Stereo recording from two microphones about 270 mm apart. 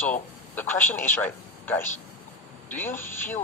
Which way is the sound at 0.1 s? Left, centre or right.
Centre.